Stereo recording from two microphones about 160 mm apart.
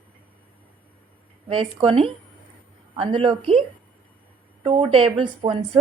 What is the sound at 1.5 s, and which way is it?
A woman's voice, 35° right (ahead or behind).